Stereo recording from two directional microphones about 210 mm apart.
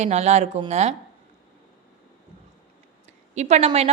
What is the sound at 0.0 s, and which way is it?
Speech, 30° right (ahead or behind).